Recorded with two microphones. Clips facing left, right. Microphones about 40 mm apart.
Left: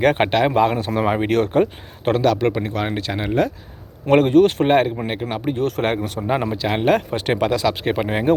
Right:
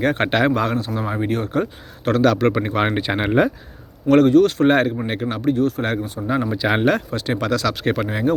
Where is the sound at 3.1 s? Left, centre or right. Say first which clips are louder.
Right 3 dB; right.